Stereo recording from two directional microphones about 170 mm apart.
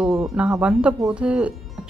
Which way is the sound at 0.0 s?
5° right (ahead or behind).